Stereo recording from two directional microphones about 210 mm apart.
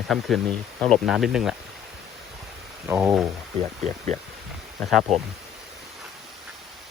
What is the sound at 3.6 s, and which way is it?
Speech, 35° right (ahead or behind).